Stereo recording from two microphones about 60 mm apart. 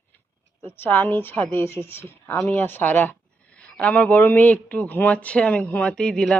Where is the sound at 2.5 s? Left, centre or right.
Left.